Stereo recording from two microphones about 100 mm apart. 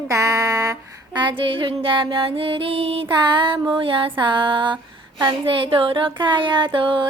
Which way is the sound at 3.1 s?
55° right (ahead or behind).